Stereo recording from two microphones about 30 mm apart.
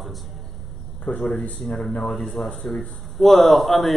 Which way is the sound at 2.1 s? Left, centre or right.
Centre.